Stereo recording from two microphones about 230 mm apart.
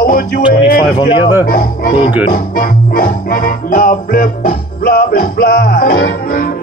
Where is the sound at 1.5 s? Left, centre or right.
Left.